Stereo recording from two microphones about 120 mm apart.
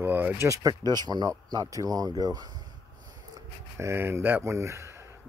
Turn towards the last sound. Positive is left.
turn(degrees=-25)  # may be behind; listen again after turning